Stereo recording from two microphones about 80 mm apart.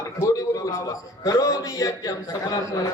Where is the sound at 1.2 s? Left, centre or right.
Left.